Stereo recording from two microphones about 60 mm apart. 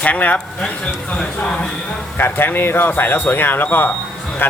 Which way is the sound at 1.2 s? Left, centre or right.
Centre.